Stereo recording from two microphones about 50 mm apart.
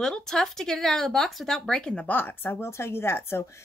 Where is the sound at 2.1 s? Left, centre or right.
Left.